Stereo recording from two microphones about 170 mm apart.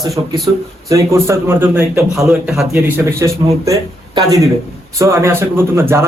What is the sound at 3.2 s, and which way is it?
A man's voice, 20° right (ahead or behind).